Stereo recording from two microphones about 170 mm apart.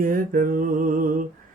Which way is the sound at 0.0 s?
55° right (ahead or behind).